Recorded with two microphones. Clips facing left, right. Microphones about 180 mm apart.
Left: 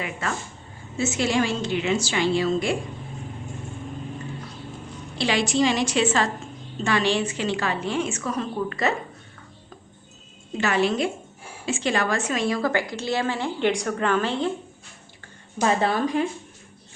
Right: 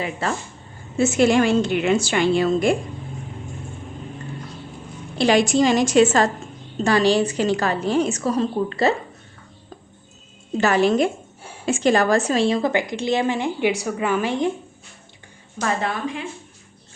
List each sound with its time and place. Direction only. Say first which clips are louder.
0.0 s a woman's voice: right 4 dB; 30° right (ahead or behind)
0.9 s a woman's voice: right 6 dB; 55° right (ahead or behind)
5.1 s a woman's voice: right 6 dB; 45° right (ahead or behind)
10.6 s a woman's voice: right 5 dB; 40° right (ahead or behind); by 14.5 s 15° right (ahead or behind)
15.8 s speech: left 4 dB; 35° left (ahead or behind)